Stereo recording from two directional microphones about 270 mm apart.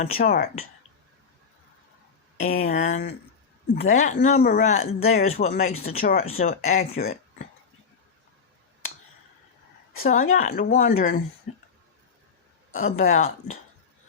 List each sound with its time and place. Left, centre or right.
0.0 s speech: left
2.4 s speech: left
10.0 s speech: left
12.7 s speech: left